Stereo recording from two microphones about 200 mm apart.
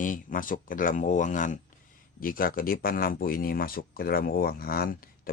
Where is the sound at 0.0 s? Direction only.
40° left (ahead or behind).